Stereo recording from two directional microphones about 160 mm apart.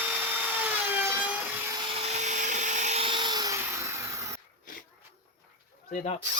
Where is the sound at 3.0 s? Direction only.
30° right (ahead or behind).